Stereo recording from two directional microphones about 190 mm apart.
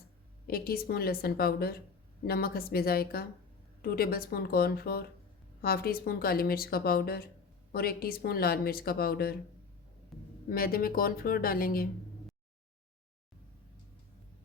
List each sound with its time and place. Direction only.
0.4 s speech: 55° left (ahead or behind)
10.1 s a sound: centre (ahead or behind)
10.5 s speech: 50° left (ahead or behind)